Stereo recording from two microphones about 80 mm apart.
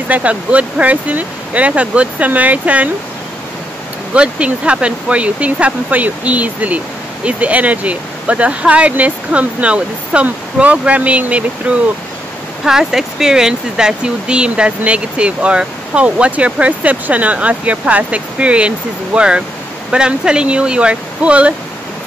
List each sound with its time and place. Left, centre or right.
0.1 s speech: centre
4.1 s speech: centre
12.6 s speech: centre